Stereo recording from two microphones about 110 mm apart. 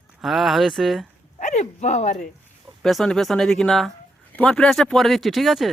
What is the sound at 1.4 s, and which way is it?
Speech, 90° left.